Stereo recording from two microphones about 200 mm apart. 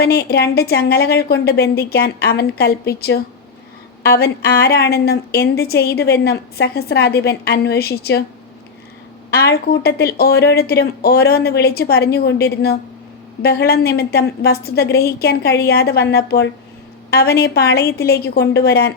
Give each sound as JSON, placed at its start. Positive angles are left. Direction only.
{"t": 0.0, "sound": "a woman's voice", "side_deg": 50}
{"t": 9.3, "sound": "a woman's voice", "side_deg": 55}